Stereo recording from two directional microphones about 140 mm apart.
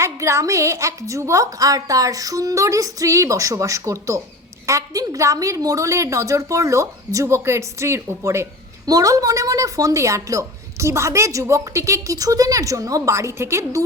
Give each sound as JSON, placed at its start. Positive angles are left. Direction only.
{"t": 0.0, "sound": "a woman's voice", "side_deg": -20}